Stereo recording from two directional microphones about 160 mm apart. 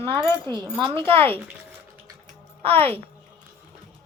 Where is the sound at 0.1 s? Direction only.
30° right (ahead or behind).